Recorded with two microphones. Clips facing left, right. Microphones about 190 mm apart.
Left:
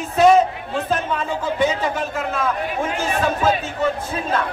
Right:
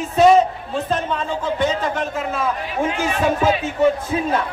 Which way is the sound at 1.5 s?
5° left (ahead or behind).